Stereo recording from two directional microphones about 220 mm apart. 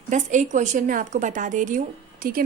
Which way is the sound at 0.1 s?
35° right (ahead or behind).